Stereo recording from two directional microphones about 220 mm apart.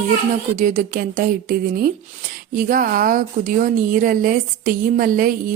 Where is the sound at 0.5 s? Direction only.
35° right (ahead or behind).